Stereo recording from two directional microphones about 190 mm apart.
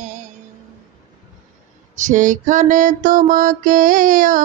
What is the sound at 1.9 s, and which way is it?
Mantra, 40° right (ahead or behind).